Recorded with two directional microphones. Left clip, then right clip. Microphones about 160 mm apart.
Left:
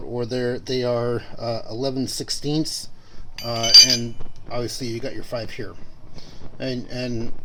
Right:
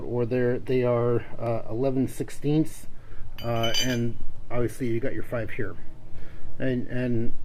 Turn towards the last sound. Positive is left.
turn(degrees=30)  # may be behind; listen again after turning